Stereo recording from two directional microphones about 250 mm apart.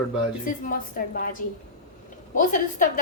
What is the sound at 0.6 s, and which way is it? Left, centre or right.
A woman's voice, left.